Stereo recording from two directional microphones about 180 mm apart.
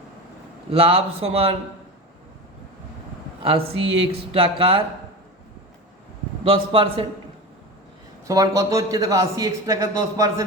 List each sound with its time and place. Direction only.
0.7 s a man's voice: 30° right (ahead or behind)
3.4 s a man's voice: 30° right (ahead or behind)
6.4 s a man's voice: 30° right (ahead or behind)
8.3 s a man's voice: 20° right (ahead or behind)